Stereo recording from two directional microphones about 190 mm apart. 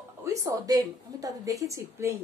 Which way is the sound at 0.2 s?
15° right (ahead or behind).